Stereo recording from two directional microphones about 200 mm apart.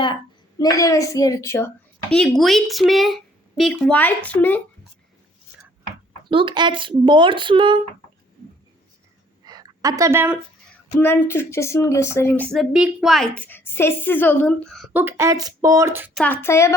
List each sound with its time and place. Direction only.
0.6 s speech: 15° left (ahead or behind)
6.2 s speech: 25° right (ahead or behind)
9.4 s a sound: 20° right (ahead or behind)
11.0 s speech: 10° left (ahead or behind)
14.9 s speech: 10° right (ahead or behind)
16.1 s speech: 10° left (ahead or behind)